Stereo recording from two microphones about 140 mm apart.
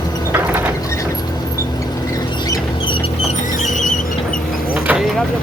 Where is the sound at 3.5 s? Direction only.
65° left (ahead or behind).